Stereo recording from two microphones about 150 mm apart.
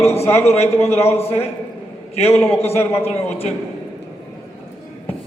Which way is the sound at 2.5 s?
40° left (ahead or behind).